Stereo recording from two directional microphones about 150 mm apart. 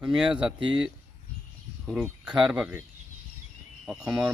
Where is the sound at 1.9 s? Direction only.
5° right (ahead or behind).